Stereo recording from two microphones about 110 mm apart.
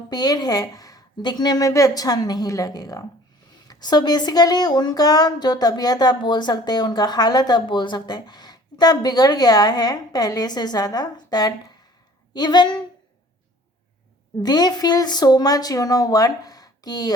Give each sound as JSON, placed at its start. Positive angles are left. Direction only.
{"t": 0.1, "sound": "speech", "side_deg": 40}
{"t": 14.4, "sound": "speech", "side_deg": 40}